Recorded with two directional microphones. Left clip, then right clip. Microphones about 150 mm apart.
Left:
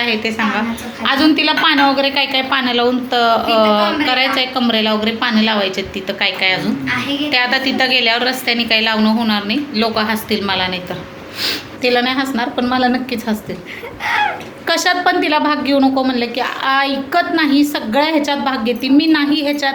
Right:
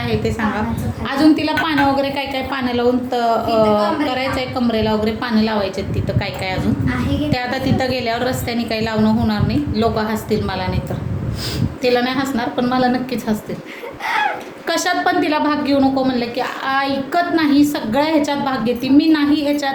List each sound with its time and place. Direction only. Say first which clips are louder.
0.0 s a woman's voice: left 4 dB; 15° right (ahead or behind)
1.0 s a woman's voice: left 3 dB; centre (ahead or behind)
6.1 s a woman's voice: left 10 dB; 15° right (ahead or behind)
14.7 s a woman's voice: left 3 dB; 5° right (ahead or behind)